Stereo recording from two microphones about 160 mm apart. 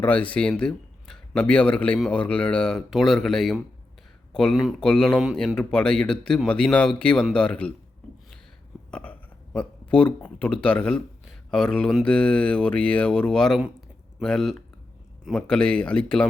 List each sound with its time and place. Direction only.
0.0 s speech: 10° left (ahead or behind)
8.9 s speech: 5° left (ahead or behind)